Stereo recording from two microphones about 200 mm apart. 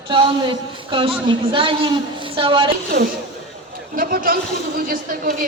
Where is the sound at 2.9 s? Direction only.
60° right (ahead or behind).